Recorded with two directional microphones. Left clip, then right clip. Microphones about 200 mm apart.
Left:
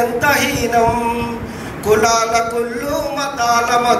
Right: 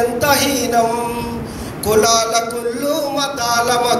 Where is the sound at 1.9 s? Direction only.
55° right (ahead or behind).